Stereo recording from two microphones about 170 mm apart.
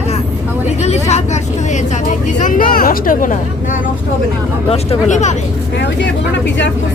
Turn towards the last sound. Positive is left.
turn(degrees=45)  # may be behind; listen again after turning